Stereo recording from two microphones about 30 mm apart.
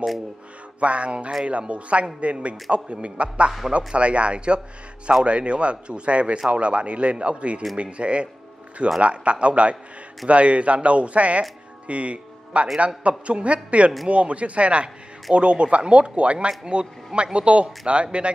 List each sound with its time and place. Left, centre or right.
0.7 s speech: right